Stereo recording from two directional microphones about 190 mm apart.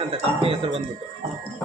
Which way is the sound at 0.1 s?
30° right (ahead or behind).